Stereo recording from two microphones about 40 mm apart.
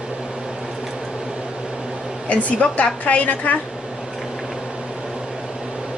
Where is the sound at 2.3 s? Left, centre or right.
Left.